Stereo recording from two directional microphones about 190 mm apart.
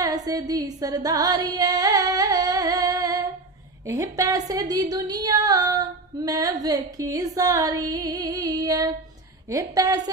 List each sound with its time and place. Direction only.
0.0 s music: 20° right (ahead or behind)
3.8 s a woman's voice: 15° right (ahead or behind)